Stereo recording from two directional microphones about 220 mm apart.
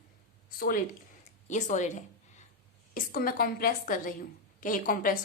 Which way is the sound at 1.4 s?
35° left (ahead or behind).